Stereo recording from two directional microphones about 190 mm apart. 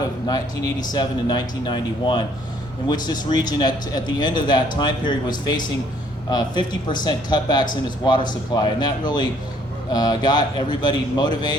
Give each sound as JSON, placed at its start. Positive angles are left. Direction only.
{"t": 0.3, "sound": "speech", "side_deg": 20}
{"t": 6.3, "sound": "speech", "side_deg": 25}